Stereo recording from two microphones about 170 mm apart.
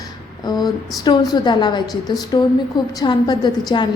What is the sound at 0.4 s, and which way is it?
A woman's voice, 25° left (ahead or behind).